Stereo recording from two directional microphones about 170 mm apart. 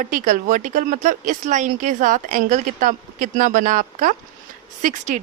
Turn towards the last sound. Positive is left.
turn(degrees=-45)  # may be behind; listen again after turning